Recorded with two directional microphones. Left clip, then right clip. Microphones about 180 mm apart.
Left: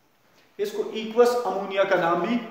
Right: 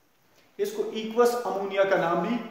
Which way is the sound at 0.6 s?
10° right (ahead or behind).